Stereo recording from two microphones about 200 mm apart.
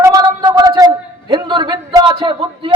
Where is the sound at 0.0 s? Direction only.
20° right (ahead or behind).